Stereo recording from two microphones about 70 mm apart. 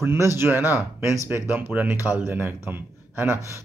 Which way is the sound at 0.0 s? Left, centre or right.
Right.